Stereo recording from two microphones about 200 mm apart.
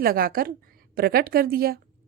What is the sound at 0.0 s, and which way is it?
A woman's voice, 45° right (ahead or behind).